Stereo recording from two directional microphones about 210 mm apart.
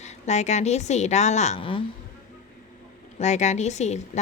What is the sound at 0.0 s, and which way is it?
A woman's voice, 35° left (ahead or behind).